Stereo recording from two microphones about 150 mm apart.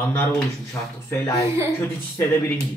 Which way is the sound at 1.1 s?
20° left (ahead or behind).